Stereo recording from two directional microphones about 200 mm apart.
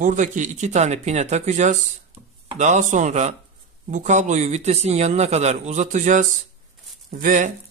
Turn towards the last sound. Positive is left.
turn(degrees=-40)  # may be behind; listen again after turning